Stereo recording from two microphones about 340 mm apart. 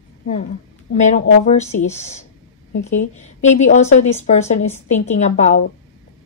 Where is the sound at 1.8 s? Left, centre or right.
Centre.